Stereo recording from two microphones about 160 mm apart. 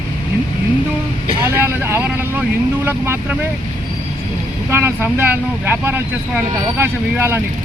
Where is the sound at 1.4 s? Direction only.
15° right (ahead or behind).